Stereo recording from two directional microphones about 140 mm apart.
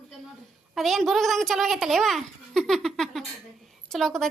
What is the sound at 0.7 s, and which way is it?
A child's voice, centre (ahead or behind).